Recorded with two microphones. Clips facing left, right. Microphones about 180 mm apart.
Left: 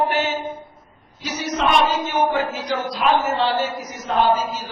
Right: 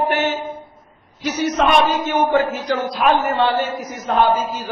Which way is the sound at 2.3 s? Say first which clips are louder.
Right 5 dB; 55° right (ahead or behind).